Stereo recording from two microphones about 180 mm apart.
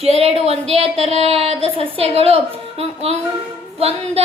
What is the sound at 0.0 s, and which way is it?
Child singing, 35° right (ahead or behind).